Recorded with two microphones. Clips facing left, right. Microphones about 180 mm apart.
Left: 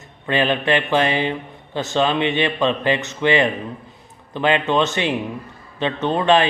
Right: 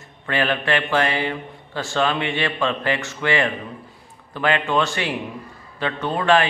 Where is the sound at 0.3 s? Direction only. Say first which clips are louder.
Left 3 dB; 20° left (ahead or behind).